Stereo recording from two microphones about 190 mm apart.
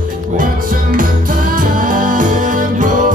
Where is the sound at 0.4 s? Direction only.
45° right (ahead or behind).